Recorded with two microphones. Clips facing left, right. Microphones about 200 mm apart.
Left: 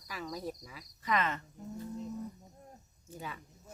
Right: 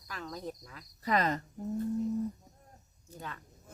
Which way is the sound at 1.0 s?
40° right (ahead or behind).